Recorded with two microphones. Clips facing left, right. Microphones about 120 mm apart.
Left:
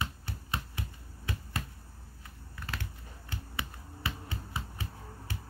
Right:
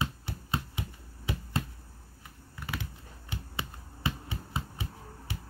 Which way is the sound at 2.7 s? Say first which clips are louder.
Right 3 dB; 20° right (ahead or behind).